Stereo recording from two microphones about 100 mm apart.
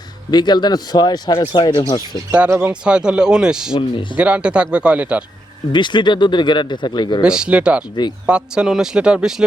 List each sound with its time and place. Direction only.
0.3 s speech: 45° left (ahead or behind)
2.5 s speech: 20° right (ahead or behind)
2.8 s speech: 10° right (ahead or behind)
3.8 s speech: 60° left (ahead or behind)
4.2 s speech: 10° right (ahead or behind)
5.7 s speech: 50° left (ahead or behind)
7.2 s speech: 10° right (ahead or behind)